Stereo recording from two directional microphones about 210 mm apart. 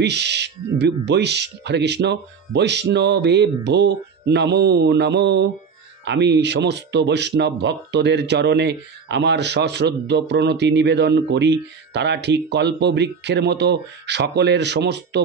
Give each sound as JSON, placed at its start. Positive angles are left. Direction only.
{"t": 0.0, "sound": "speech", "side_deg": -55}